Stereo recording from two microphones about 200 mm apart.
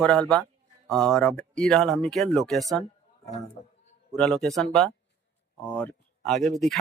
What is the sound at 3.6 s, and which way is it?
Speech, 20° left (ahead or behind).